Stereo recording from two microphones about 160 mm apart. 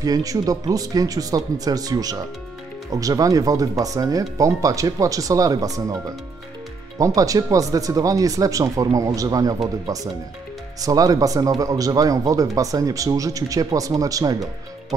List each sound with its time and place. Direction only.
0.0 s speech: 20° right (ahead or behind)
7.0 s speech: 20° right (ahead or behind)
10.8 s speech: 20° right (ahead or behind)